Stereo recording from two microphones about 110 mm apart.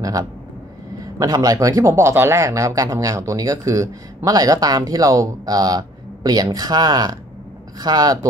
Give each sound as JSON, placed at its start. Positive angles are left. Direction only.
{"t": 0.0, "sound": "speech", "side_deg": -35}